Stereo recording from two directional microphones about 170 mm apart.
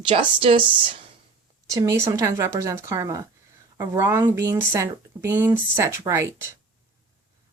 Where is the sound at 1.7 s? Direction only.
20° right (ahead or behind).